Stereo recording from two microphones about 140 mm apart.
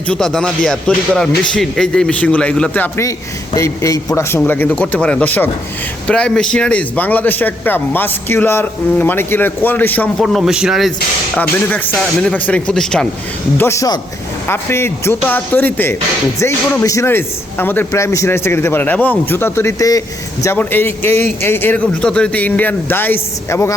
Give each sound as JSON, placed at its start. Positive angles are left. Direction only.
{"t": 0.1, "sound": "a man's voice", "side_deg": 5}
{"t": 3.5, "sound": "a man's voice", "side_deg": 25}
{"t": 11.3, "sound": "a man's voice", "side_deg": 10}
{"t": 13.6, "sound": "a man's voice", "side_deg": 20}